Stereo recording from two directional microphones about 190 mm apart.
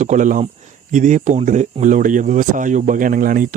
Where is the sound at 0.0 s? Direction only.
40° right (ahead or behind).